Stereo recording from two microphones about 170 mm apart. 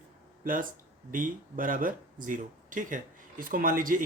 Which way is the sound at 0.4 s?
55° right (ahead or behind).